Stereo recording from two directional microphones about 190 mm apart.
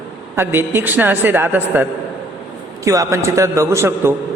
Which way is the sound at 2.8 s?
15° right (ahead or behind).